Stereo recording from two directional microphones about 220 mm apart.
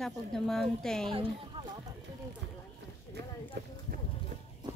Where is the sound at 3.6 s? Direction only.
50° right (ahead or behind).